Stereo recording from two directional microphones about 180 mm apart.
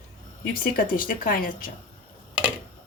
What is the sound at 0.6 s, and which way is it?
A woman's voice, 55° left (ahead or behind).